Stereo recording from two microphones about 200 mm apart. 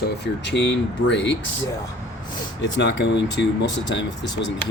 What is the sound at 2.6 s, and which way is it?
Speech, 65° left (ahead or behind).